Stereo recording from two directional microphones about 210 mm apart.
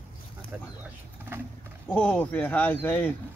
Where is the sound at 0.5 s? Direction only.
5° right (ahead or behind).